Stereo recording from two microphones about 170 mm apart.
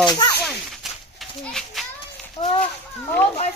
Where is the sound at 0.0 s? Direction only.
25° left (ahead or behind).